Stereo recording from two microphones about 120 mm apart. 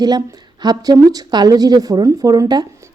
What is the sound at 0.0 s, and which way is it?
A woman's voice, 35° right (ahead or behind).